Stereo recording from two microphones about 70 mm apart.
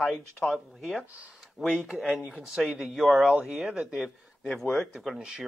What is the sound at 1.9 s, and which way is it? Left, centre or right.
Speech, right.